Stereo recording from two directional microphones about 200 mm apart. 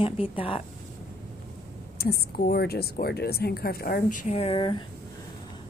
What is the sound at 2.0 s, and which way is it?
Speech, 50° left (ahead or behind).